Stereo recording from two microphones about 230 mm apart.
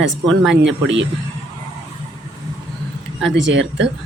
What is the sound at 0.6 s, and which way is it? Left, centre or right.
Speech, right.